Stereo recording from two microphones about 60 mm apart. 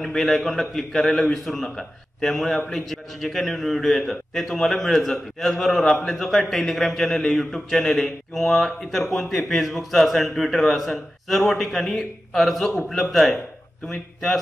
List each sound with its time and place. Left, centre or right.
0.0 s a man's voice: centre